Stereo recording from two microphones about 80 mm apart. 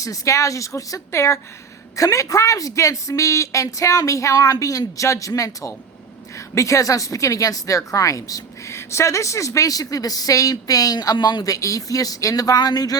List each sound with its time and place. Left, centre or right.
0.0 s a woman's voice: left
11.5 s speech: left